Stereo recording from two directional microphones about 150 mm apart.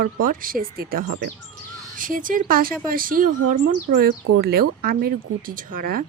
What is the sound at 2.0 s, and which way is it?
Speech, 65° right (ahead or behind).